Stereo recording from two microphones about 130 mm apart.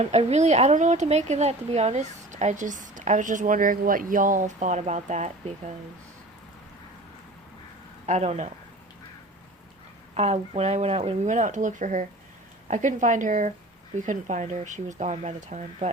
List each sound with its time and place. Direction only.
0.0 s speech: 55° right (ahead or behind)
8.0 s speech: 60° right (ahead or behind)
10.2 s speech: 55° right (ahead or behind)